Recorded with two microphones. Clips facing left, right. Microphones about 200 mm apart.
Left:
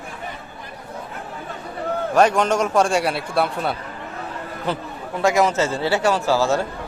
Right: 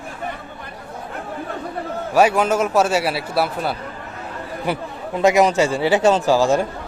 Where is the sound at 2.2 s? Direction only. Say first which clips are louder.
Right 1 dB; 5° right (ahead or behind).